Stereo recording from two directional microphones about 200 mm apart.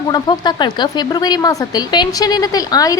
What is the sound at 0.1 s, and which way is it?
Speech, 20° left (ahead or behind).